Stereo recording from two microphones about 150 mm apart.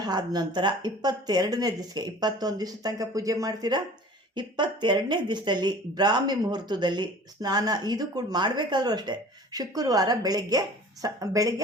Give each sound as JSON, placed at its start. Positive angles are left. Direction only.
{"t": 0.0, "sound": "speech", "side_deg": -25}